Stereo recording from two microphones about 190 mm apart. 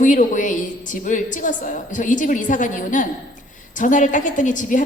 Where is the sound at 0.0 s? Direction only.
40° left (ahead or behind).